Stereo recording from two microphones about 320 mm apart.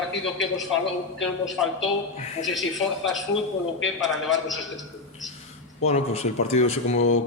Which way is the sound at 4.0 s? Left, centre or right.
Centre.